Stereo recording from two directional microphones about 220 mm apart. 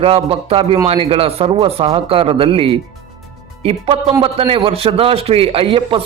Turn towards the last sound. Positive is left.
turn(degrees=-25)  # may be behind; listen again after turning